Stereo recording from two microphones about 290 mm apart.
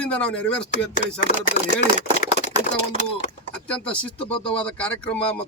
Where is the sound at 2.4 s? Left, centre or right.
Left.